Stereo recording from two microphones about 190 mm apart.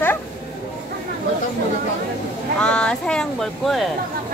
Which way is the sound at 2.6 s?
5° left (ahead or behind).